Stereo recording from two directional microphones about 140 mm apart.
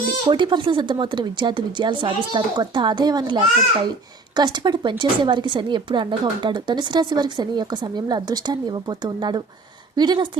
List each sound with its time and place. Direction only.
0.3 s speech: 35° right (ahead or behind)